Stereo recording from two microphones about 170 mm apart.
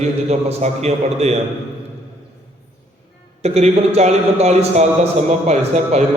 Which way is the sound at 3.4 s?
40° right (ahead or behind).